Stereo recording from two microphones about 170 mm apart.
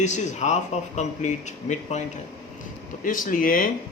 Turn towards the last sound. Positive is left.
turn(degrees=55)  # may be behind; listen again after turning